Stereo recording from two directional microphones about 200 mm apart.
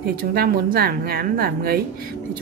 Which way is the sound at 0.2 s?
50° right (ahead or behind).